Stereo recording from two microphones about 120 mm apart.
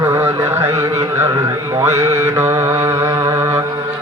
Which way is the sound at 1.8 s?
25° right (ahead or behind).